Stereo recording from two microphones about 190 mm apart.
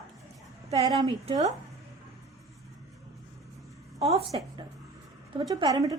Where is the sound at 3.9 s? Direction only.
20° right (ahead or behind).